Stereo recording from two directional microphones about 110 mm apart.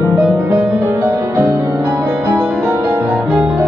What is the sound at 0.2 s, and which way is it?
Music, 10° right (ahead or behind).